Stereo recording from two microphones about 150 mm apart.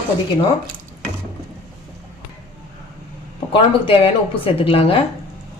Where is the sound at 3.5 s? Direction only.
35° left (ahead or behind).